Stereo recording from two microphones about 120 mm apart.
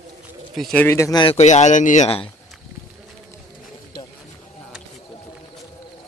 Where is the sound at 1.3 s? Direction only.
75° left (ahead or behind); by 2.1 s 90° left.